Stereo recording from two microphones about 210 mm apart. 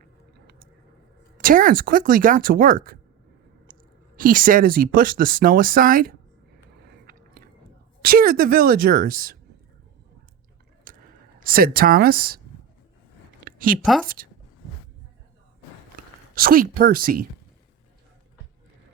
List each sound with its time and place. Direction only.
0.0 s a sound: 45° right (ahead or behind)
1.4 s speech: 40° right (ahead or behind)
4.2 s speech: 40° right (ahead or behind)
6.7 s biting: 50° right (ahead or behind)
8.0 s speech: 45° right (ahead or behind)
10.9 s sigh: 40° right (ahead or behind)
11.4 s speech: 45° right (ahead or behind)
13.4 s a sound: 40° right (ahead or behind)
13.8 s a woman's voice: centre (ahead or behind)
16.3 s speech: 45° right (ahead or behind)